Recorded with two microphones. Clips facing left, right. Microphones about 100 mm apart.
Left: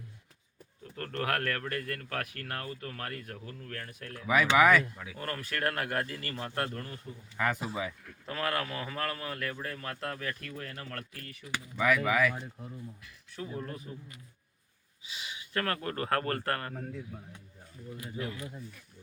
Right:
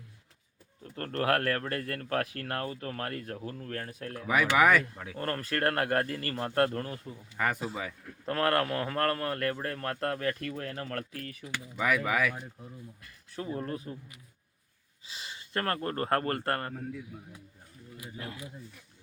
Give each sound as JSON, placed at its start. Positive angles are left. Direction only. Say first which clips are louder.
{"t": 0.9, "sound": "speech", "louder": "right 4 dB", "side_deg": -40}
{"t": 4.5, "sound": "speech", "louder": "even", "side_deg": 0}
{"t": 4.9, "sound": "speech", "louder": "right 4 dB", "side_deg": -50}
{"t": 7.6, "sound": "speech", "louder": "even", "side_deg": 10}
{"t": 8.3, "sound": "a man's voice", "louder": "right 6 dB", "side_deg": -60}
{"t": 11.8, "sound": "speech", "louder": "left 1 dB", "side_deg": -5}
{"t": 13.1, "sound": "speech", "louder": "right 6 dB", "side_deg": -45}
{"t": 15.0, "sound": "speech", "louder": "left 1 dB", "side_deg": -35}